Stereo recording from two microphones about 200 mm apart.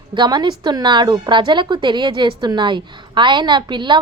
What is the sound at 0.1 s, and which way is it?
A woman's voice, 20° right (ahead or behind).